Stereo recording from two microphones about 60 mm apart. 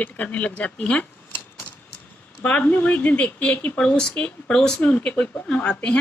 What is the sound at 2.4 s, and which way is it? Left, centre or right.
A woman's voice, left.